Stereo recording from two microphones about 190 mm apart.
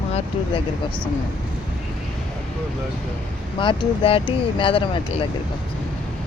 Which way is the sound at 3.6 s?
30° left (ahead or behind).